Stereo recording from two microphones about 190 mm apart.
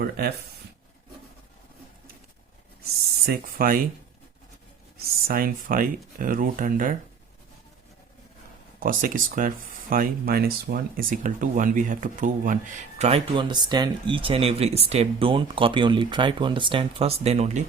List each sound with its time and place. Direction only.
2.8 s speech: 50° right (ahead or behind)
5.3 s speech: 50° right (ahead or behind)
8.8 s speech: 45° right (ahead or behind)